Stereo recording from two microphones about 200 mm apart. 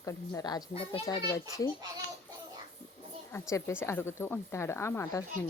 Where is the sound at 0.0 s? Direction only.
15° left (ahead or behind).